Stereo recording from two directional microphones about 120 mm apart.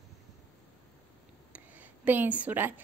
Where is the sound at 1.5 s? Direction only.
10° right (ahead or behind).